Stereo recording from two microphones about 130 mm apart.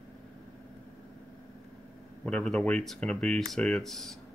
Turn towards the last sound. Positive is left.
turn(degrees=0)  # may be behind; listen again after turning